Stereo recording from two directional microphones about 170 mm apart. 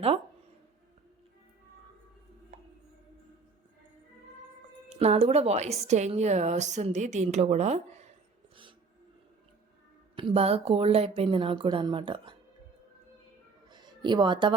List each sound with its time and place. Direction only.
4.9 s speech: 35° right (ahead or behind)
10.2 s speech: 35° right (ahead or behind)
13.7 s a sound: 25° right (ahead or behind)